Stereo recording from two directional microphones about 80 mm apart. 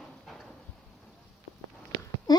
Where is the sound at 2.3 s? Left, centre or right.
Left.